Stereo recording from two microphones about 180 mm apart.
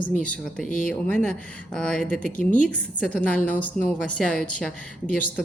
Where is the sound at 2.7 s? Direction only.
5° left (ahead or behind).